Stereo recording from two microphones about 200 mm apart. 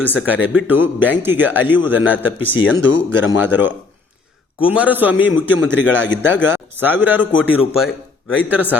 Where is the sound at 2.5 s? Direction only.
80° left.